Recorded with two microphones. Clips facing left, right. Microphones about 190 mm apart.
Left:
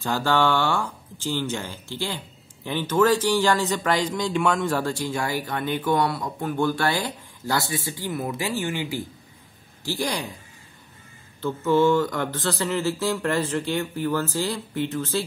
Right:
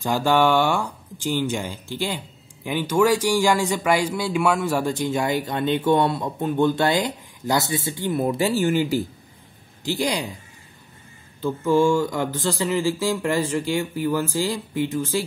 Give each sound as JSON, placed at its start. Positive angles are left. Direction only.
{"t": 0.0, "sound": "speech", "side_deg": -15}
{"t": 9.8, "sound": "speech", "side_deg": -15}
{"t": 11.4, "sound": "speech", "side_deg": -15}